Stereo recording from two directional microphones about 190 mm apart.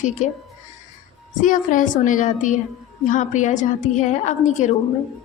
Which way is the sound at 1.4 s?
45° left (ahead or behind).